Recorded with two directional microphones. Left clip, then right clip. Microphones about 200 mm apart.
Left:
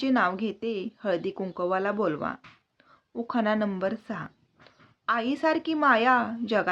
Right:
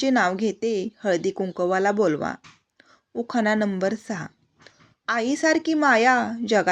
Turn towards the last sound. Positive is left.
turn(degrees=-20)  # may be behind; listen again after turning